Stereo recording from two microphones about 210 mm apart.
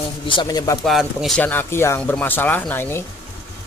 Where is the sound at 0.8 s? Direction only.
Centre (ahead or behind).